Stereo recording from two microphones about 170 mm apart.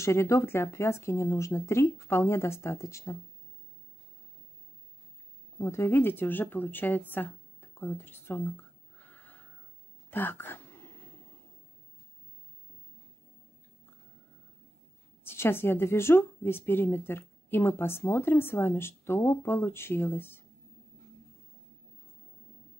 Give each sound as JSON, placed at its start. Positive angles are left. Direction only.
{"t": 0.0, "sound": "a woman's voice", "side_deg": 15}
{"t": 5.6, "sound": "a woman's voice", "side_deg": 15}
{"t": 9.1, "sound": "a sound", "side_deg": 10}
{"t": 10.1, "sound": "speech", "side_deg": 10}
{"t": 15.2, "sound": "a woman's voice", "side_deg": 15}